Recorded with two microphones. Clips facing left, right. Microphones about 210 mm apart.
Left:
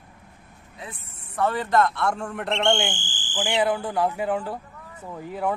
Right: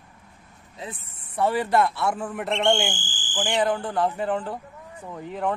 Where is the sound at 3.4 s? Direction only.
10° left (ahead or behind).